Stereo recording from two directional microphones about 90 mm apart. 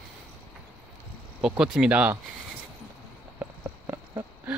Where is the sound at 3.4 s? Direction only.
30° right (ahead or behind).